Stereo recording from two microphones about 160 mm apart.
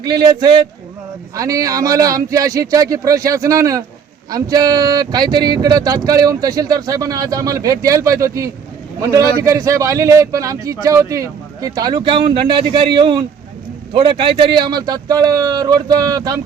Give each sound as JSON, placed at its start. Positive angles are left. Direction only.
{"t": 0.0, "sound": "speech", "side_deg": -25}